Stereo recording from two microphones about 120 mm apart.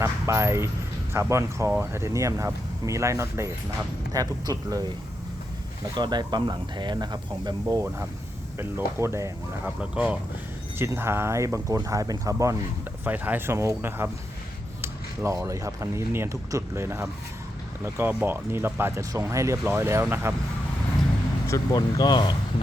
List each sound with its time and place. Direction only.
0.0 s speech: 25° right (ahead or behind)
6.0 s speech: 35° right (ahead or behind)
9.6 s speech: 10° right (ahead or behind); by 12.5 s 25° right (ahead or behind)
13.1 s speech: 15° right (ahead or behind)
21.4 s speech: 30° left (ahead or behind)